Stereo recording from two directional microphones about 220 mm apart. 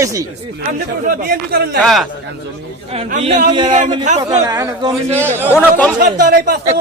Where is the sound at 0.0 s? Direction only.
15° right (ahead or behind).